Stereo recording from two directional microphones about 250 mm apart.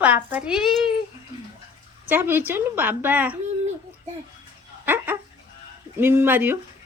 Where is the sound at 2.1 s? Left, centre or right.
Centre.